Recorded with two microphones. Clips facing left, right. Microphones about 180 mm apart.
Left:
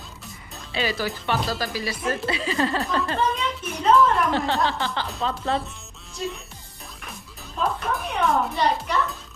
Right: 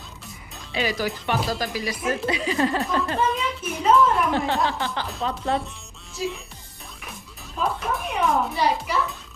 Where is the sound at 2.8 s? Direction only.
Centre (ahead or behind).